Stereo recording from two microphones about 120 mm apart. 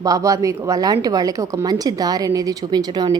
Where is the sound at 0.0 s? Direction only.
30° right (ahead or behind).